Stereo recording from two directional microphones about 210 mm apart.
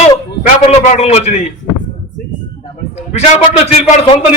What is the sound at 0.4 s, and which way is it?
Speech, 35° left (ahead or behind).